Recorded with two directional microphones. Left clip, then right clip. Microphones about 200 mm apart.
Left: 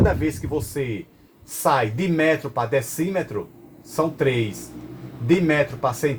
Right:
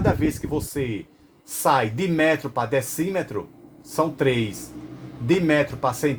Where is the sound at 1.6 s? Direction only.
35° right (ahead or behind).